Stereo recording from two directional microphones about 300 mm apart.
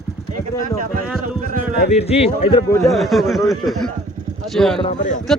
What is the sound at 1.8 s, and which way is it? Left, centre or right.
Speech, left.